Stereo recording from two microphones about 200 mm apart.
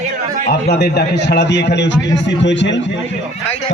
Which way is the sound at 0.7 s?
55° left (ahead or behind).